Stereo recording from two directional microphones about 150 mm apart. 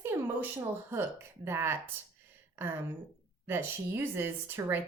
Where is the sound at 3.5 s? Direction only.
15° right (ahead or behind).